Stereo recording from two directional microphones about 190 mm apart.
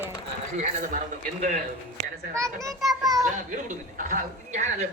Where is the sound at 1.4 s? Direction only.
50° right (ahead or behind).